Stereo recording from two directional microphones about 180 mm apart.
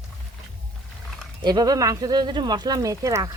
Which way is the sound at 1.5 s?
20° right (ahead or behind).